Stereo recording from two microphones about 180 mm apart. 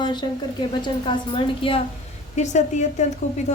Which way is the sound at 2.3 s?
40° left (ahead or behind).